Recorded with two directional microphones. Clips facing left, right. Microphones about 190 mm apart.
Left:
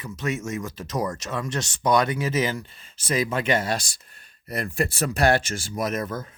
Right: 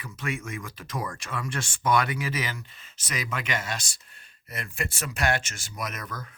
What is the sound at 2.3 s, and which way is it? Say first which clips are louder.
Speech: left 8 dB; 30° left (ahead or behind).